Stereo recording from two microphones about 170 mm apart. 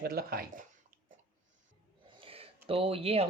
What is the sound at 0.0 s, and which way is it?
Speech, 65° right (ahead or behind).